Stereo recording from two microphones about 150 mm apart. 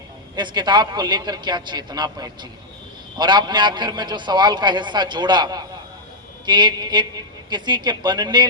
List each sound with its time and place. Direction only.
0.3 s a man's voice: 30° right (ahead or behind)